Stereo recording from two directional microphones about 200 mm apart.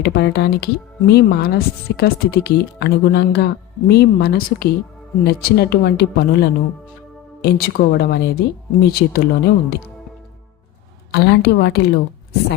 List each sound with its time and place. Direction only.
0.0 s speech: 55° left (ahead or behind)
11.1 s a woman's voice: 55° left (ahead or behind)